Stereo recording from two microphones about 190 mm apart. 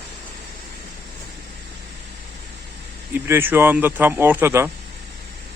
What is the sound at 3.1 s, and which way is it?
Speech, 10° right (ahead or behind).